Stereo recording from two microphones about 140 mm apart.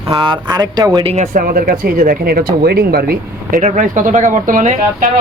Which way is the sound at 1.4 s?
90° right.